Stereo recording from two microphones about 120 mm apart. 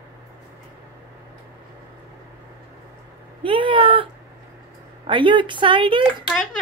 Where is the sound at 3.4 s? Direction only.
45° right (ahead or behind).